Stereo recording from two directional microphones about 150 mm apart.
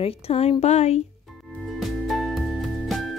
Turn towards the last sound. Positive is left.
turn(degrees=0)  # may be behind; listen again after turning